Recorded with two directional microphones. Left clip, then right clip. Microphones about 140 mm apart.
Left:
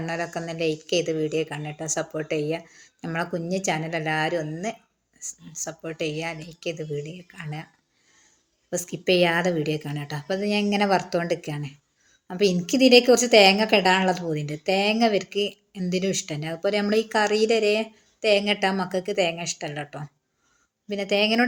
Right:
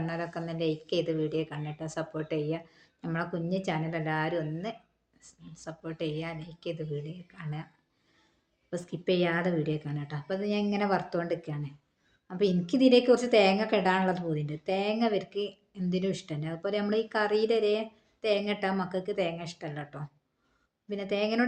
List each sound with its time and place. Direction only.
0.0 s a woman's voice: 25° left (ahead or behind)
8.7 s a woman's voice: 30° left (ahead or behind)